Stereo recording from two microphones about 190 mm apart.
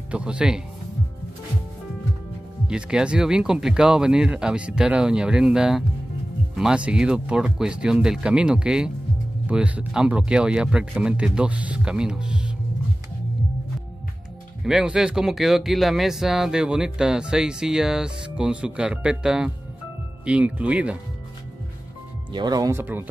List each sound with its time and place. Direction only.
0.1 s speech: 5° right (ahead or behind)
2.7 s speech: 5° right (ahead or behind)
14.6 s speech: 5° right (ahead or behind)
22.3 s speech: 20° right (ahead or behind)